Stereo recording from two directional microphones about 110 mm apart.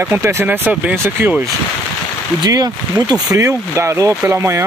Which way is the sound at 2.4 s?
35° right (ahead or behind).